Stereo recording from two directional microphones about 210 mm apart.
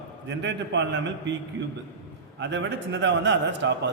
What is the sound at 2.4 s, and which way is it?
A man's voice, 55° right (ahead or behind).